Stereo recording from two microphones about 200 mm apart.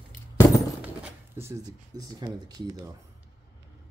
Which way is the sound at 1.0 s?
15° right (ahead or behind).